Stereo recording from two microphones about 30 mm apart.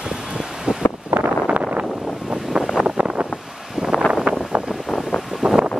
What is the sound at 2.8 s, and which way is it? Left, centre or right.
Vehicle, right.